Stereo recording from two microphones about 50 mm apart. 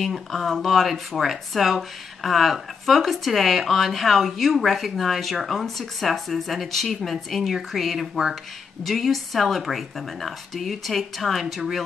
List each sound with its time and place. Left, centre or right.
0.0 s speech: centre